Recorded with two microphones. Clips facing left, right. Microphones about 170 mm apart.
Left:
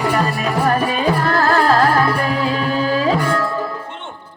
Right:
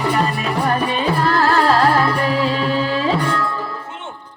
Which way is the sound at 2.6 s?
40° left (ahead or behind).